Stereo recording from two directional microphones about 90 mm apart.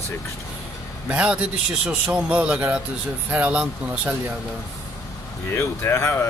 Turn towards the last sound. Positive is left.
turn(degrees=30)  # may be behind; listen again after turning